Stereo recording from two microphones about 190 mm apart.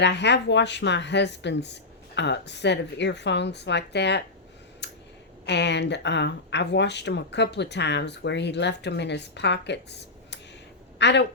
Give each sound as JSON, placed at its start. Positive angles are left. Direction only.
{"t": 0.0, "sound": "speech", "side_deg": 65}
{"t": 4.8, "sound": "a sound", "side_deg": 65}
{"t": 5.5, "sound": "speech", "side_deg": 65}